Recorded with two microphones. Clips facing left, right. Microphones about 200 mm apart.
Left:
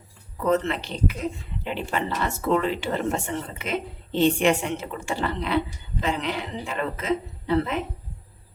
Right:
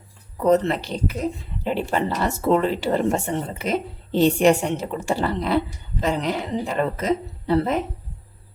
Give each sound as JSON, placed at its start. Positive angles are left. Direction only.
{"t": 0.4, "sound": "speech", "side_deg": -40}